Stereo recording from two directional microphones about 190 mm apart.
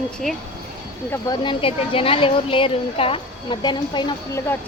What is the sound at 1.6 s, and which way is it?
A woman's voice, 30° left (ahead or behind).